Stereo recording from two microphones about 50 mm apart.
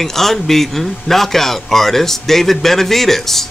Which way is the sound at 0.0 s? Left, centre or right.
Centre.